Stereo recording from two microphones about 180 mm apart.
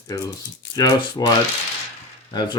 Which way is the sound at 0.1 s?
20° left (ahead or behind).